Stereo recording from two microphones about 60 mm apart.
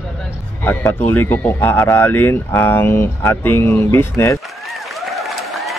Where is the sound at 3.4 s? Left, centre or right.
Left.